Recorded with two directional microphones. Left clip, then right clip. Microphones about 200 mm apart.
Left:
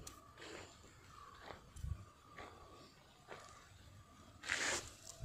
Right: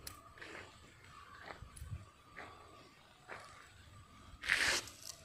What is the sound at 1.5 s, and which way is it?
Roaring cats, 10° left (ahead or behind).